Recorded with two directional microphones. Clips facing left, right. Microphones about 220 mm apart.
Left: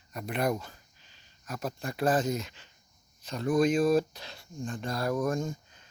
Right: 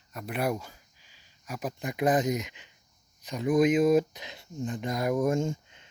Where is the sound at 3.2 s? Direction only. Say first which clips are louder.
Right 2 dB; 15° right (ahead or behind).